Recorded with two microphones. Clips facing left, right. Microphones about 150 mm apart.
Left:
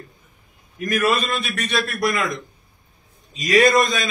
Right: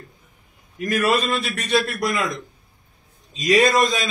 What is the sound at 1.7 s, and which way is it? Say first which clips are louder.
Speech: right 1 dB; 30° right (ahead or behind).